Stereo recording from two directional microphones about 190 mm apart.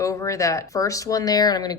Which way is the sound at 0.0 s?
15° left (ahead or behind).